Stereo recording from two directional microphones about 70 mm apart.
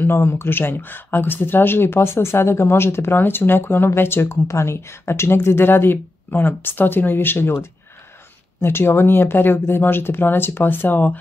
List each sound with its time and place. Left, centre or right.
0.0 s speech: left
8.5 s speech: left